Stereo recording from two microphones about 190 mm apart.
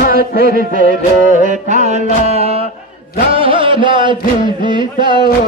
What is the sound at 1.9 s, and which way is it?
Music, 35° right (ahead or behind).